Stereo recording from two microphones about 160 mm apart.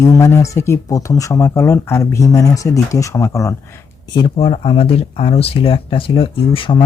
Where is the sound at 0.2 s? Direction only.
20° left (ahead or behind).